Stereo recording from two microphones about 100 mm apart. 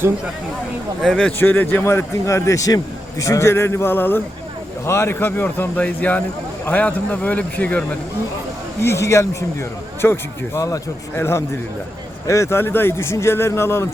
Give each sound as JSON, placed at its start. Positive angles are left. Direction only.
{"t": 1.0, "sound": "speech", "side_deg": 0}
{"t": 1.4, "sound": "a man's voice", "side_deg": 20}
{"t": 8.8, "sound": "a man's voice", "side_deg": 30}